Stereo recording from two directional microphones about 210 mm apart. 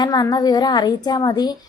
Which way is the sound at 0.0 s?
20° left (ahead or behind).